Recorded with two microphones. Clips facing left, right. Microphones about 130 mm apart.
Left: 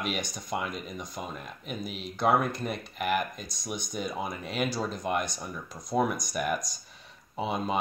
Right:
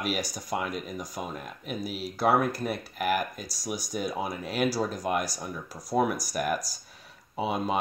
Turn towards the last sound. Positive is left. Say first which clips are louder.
# right 2 dB
turn(degrees=-5)  # may be behind; listen again after turning